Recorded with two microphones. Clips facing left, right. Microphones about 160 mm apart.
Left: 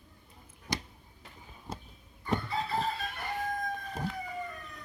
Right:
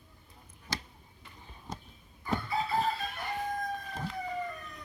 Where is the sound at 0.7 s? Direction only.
15° left (ahead or behind).